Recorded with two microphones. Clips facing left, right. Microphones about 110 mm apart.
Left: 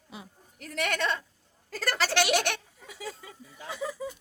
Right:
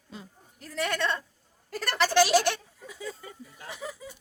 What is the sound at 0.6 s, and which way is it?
Speech, 75° left (ahead or behind).